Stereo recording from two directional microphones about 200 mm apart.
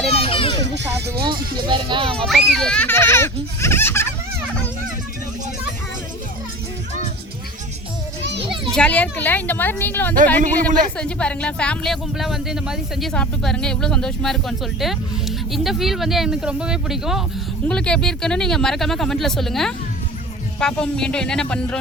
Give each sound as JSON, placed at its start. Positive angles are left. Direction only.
{"t": 0.2, "sound": "children playing", "side_deg": 25}
{"t": 0.6, "sound": "music", "side_deg": -60}
{"t": 1.2, "sound": "speech", "side_deg": -25}
{"t": 2.1, "sound": "speech", "side_deg": 0}
{"t": 8.2, "sound": "children playing", "side_deg": -60}
{"t": 8.7, "sound": "speech", "side_deg": 5}